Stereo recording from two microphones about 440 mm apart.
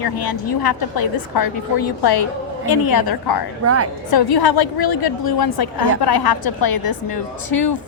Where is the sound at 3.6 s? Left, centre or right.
Right.